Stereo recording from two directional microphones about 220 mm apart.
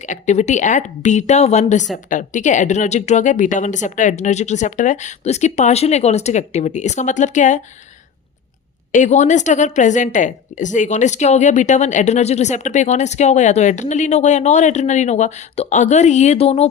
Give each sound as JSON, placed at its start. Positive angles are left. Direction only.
{"t": 0.0, "sound": "a woman's voice", "side_deg": 35}
{"t": 8.9, "sound": "a woman's voice", "side_deg": 35}